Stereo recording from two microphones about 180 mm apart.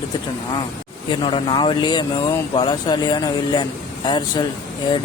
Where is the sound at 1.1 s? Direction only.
25° left (ahead or behind).